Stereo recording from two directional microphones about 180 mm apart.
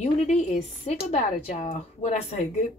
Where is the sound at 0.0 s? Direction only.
40° left (ahead or behind).